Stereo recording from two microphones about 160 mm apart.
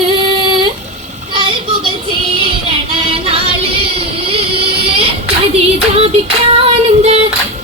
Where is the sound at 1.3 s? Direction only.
35° right (ahead or behind).